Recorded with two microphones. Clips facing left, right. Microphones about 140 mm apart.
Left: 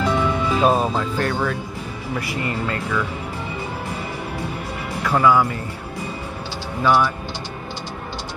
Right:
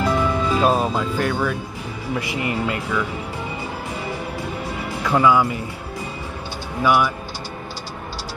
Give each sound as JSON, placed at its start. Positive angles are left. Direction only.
{"t": 0.0, "sound": "music", "side_deg": -5}
{"t": 0.9, "sound": "speech", "side_deg": -10}
{"t": 5.2, "sound": "speech", "side_deg": -15}
{"t": 6.8, "sound": "speech", "side_deg": -10}